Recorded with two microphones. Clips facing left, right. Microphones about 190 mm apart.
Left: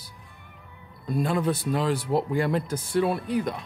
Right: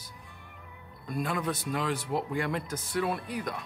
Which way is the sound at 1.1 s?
30° left (ahead or behind).